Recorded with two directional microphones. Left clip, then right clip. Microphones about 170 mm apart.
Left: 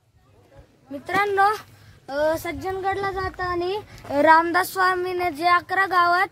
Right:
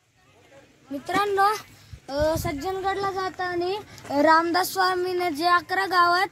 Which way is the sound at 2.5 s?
30° left (ahead or behind).